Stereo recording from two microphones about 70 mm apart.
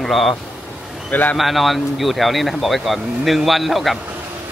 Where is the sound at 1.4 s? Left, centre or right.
Centre.